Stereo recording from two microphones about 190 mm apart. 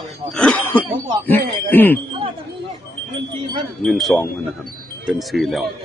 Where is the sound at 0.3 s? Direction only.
5° left (ahead or behind).